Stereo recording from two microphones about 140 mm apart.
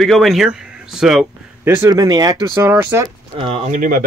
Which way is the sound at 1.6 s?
15° right (ahead or behind).